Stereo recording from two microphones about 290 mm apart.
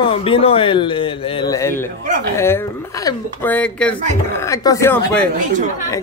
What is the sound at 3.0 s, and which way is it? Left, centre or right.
Speech, centre.